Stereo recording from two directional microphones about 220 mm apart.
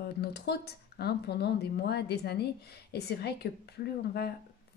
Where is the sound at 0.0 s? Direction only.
45° left (ahead or behind).